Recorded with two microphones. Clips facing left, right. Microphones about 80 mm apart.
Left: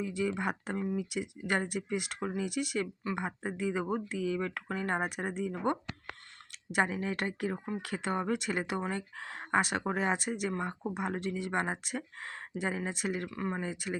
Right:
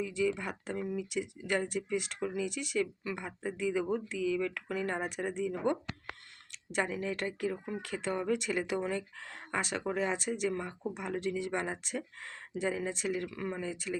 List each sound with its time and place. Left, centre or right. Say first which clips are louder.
0.0 s speech: even; left
2.2 s speech: even; left
2.5 s speech: even; left
3.0 s speech: left 3 dB; left
4.4 s speech: right 1 dB; left
6.7 s speech: left 2 dB; left
7.5 s speech: left 1 dB; left
7.8 s speech: left 2 dB; left
9.6 s speech: left 3 dB; left
13.2 s speech: left 1 dB; left
13.7 s speech: even; left